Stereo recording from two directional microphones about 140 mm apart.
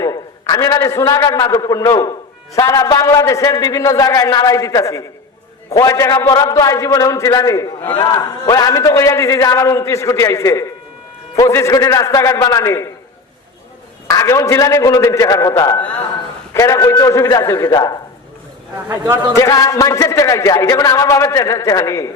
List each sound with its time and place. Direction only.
0.0 s a man's voice: 30° left (ahead or behind)
14.1 s a man's voice: 25° left (ahead or behind)
18.9 s a man's voice: 15° right (ahead or behind)
19.3 s a man's voice: 20° left (ahead or behind)